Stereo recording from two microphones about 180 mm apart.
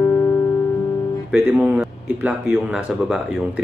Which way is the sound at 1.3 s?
5° right (ahead or behind).